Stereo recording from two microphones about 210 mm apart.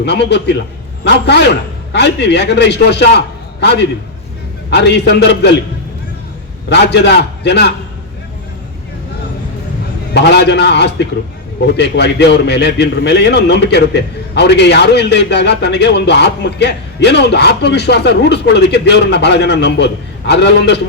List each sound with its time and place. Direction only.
0.0 s a man's voice: 55° left (ahead or behind)
6.7 s a man's voice: 55° left (ahead or behind)
10.2 s a man's voice: 55° left (ahead or behind)